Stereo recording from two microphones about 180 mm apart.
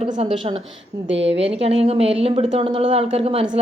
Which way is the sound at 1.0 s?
85° right.